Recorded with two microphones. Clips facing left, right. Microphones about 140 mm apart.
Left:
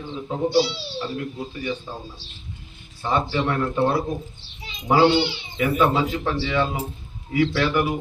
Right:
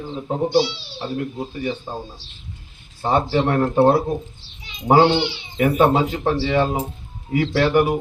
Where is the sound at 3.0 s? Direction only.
35° right (ahead or behind).